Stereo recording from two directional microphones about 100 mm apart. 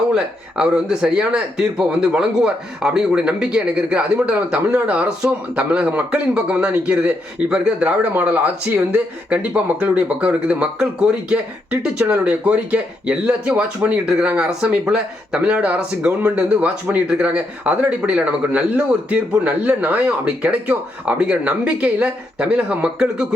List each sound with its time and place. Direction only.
0.1 s speech: 10° right (ahead or behind)